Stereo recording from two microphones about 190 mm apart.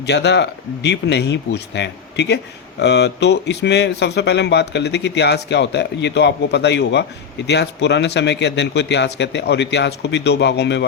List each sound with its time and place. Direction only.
0.0 s speech: 60° left (ahead or behind)